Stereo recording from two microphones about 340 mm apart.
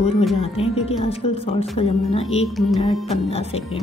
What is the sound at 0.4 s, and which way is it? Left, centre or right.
A woman's voice, centre.